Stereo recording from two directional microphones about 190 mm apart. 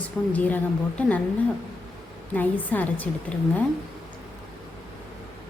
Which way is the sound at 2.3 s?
10° left (ahead or behind).